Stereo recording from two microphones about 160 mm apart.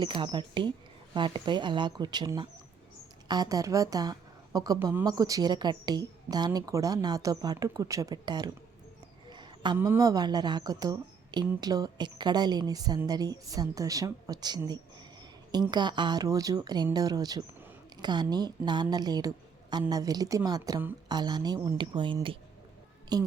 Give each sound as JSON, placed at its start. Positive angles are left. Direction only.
{"t": 0.0, "sound": "a woman's voice", "side_deg": -30}
{"t": 9.3, "sound": "a sound", "side_deg": -30}
{"t": 9.7, "sound": "speech", "side_deg": -15}